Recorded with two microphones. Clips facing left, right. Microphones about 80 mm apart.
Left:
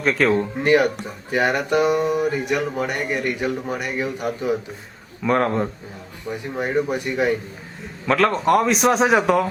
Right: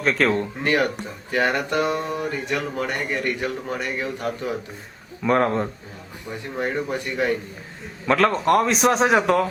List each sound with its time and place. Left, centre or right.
0.0 s a man's voice: centre
0.6 s speech: centre
5.2 s a man's voice: centre
6.2 s speech: centre
8.0 s a man's voice: centre